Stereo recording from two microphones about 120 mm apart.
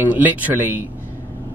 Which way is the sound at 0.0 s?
15° right (ahead or behind).